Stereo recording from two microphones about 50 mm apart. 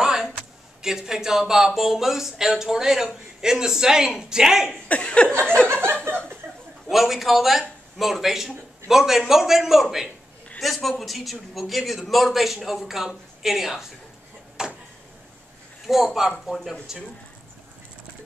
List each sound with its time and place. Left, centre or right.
0.0 s a sound: centre
0.8 s speech: centre
4.8 s speech: left
5.6 s chuckle: centre
6.4 s chuckle: right
6.9 s a man's voice: centre
14.6 s tick-tock: centre
15.9 s a man's voice: centre